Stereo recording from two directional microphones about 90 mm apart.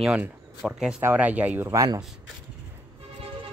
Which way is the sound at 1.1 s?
15° right (ahead or behind).